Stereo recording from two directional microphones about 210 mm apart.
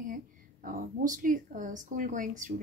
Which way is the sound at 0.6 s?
40° right (ahead or behind).